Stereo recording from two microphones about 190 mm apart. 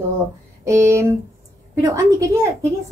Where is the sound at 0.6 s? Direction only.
15° right (ahead or behind).